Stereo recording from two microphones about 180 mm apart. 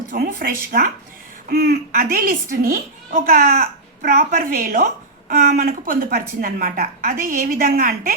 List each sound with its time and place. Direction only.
0.1 s a woman's voice: 50° right (ahead or behind)